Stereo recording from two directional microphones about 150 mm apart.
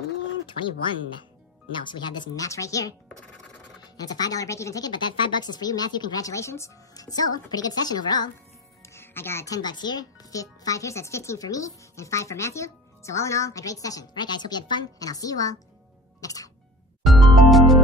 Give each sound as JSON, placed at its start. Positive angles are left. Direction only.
{"t": 0.5, "sound": "speech", "side_deg": 35}
{"t": 3.9, "sound": "speech", "side_deg": 25}
{"t": 8.8, "sound": "speech", "side_deg": 15}
{"t": 16.2, "sound": "music", "side_deg": 25}
{"t": 17.0, "sound": "music", "side_deg": 0}